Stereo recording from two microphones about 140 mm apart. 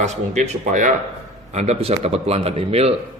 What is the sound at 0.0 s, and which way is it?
Speech, 60° right (ahead or behind).